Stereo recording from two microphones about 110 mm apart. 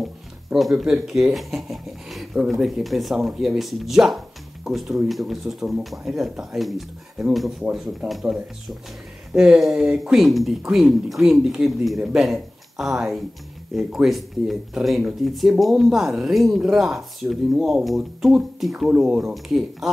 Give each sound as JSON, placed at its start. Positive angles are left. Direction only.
{"t": 0.0, "sound": "music", "side_deg": 0}
{"t": 0.9, "sound": "speech", "side_deg": -5}